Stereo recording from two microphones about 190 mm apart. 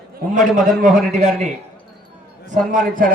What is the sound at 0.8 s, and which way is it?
Speech, 40° right (ahead or behind).